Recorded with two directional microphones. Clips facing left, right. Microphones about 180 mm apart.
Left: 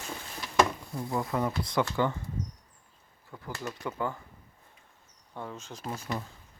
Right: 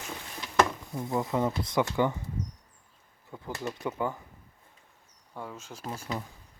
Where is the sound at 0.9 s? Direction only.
20° right (ahead or behind).